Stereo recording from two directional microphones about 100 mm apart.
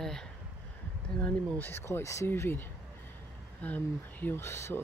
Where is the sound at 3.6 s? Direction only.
15° left (ahead or behind).